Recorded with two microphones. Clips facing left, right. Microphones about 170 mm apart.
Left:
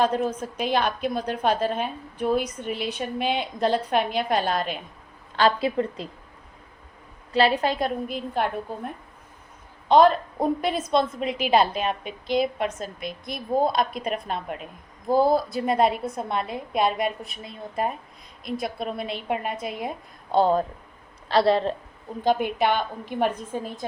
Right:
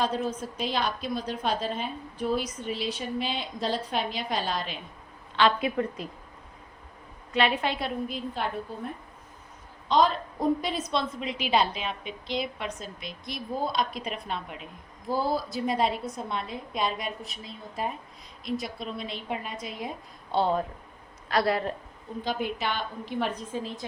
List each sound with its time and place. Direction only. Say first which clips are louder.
0.0 s a woman's voice: left 5 dB; 55° left (ahead or behind)
5.4 s a woman's voice: left 3 dB; 35° left (ahead or behind)
7.3 s a woman's voice: left 5 dB; 35° left (ahead or behind); by 8.9 s 55° left (ahead or behind)
10.6 s a woman's voice: left 6 dB; 55° left (ahead or behind)
20.3 s a woman's voice: left 5 dB; 40° left (ahead or behind)
21.2 s a woman's voice: left 6 dB; 30° left (ahead or behind)
22.2 s a woman's voice: left 8 dB; 55° left (ahead or behind)